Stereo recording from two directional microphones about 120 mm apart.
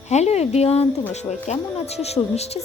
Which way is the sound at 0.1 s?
65° left (ahead or behind).